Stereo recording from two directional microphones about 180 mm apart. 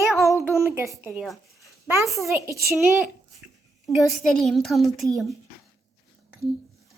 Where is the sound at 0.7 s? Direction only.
15° right (ahead or behind).